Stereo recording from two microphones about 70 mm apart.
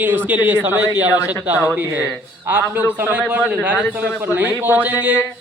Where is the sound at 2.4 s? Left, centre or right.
Right.